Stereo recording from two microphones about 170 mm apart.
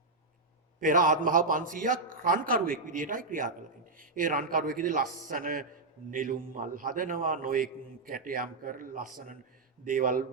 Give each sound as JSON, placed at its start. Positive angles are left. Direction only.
{"t": 0.8, "sound": "a man's voice", "side_deg": -50}